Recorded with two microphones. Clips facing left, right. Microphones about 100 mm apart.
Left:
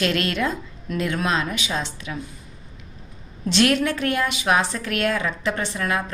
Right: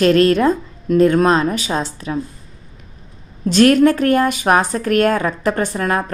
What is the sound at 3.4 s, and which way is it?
A woman's voice, 45° right (ahead or behind).